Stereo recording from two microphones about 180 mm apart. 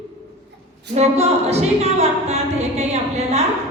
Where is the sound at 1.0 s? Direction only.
35° right (ahead or behind).